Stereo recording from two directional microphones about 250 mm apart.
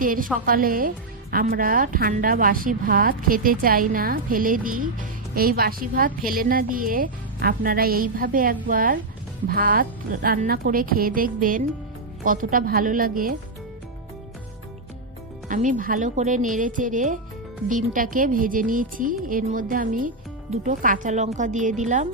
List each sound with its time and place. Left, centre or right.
0.0 s speech: right
15.4 s speech: right